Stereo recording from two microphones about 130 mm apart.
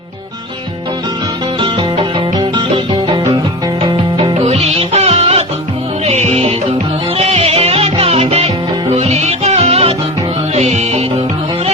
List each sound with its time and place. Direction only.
1.5 s music: 40° right (ahead or behind)
4.4 s music: 55° right (ahead or behind)